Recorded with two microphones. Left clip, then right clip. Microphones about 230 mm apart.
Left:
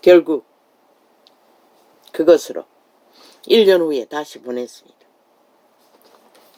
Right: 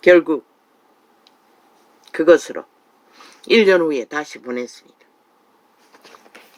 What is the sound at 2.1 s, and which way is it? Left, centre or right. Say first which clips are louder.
Speech: even; right.